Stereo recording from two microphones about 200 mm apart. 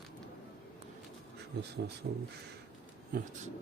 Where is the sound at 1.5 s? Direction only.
55° right (ahead or behind).